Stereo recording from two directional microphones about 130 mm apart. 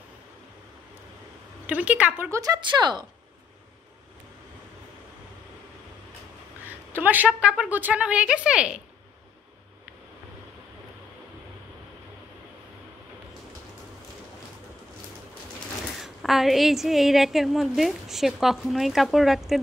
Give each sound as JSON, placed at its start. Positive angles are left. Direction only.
{"t": 1.7, "sound": "speech", "side_deg": -10}
{"t": 2.3, "sound": "a woman's voice", "side_deg": -30}
{"t": 6.9, "sound": "a woman's voice", "side_deg": -15}
{"t": 16.0, "sound": "a woman's voice", "side_deg": 0}